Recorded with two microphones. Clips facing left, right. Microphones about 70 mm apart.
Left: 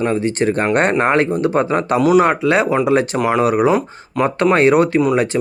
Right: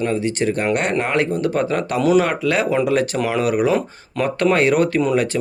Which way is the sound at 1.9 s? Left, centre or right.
Centre.